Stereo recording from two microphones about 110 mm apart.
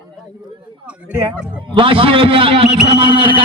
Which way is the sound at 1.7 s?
55° right (ahead or behind).